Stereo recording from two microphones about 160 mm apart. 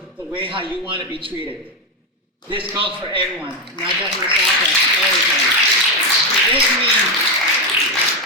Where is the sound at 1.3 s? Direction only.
10° right (ahead or behind).